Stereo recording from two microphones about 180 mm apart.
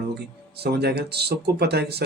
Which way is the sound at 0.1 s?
65° right (ahead or behind).